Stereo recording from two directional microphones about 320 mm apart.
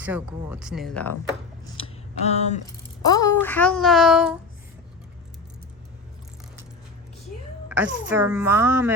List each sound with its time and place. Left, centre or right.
0.0 s speech: centre
1.7 s a sound: centre
3.1 s speech: centre
7.7 s speech: centre